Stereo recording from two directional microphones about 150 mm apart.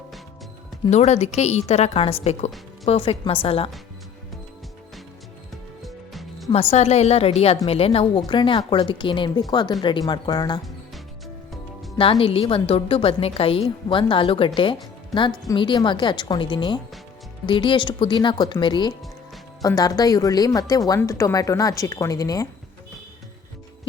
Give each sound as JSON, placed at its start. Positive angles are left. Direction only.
{"t": 0.9, "sound": "a woman's voice", "side_deg": 50}
{"t": 5.8, "sound": "music", "side_deg": 0}
{"t": 6.5, "sound": "a woman's voice", "side_deg": 40}
{"t": 11.9, "sound": "a woman's voice", "side_deg": 40}